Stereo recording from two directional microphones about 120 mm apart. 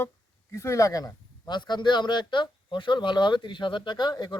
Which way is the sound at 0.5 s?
25° left (ahead or behind).